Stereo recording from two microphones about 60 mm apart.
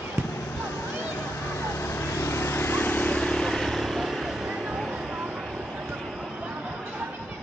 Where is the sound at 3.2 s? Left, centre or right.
Centre.